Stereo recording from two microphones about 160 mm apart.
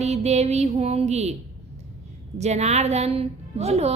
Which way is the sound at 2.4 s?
45° right (ahead or behind).